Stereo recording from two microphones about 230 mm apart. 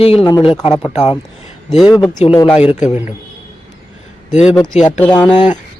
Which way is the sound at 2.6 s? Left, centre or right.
Left.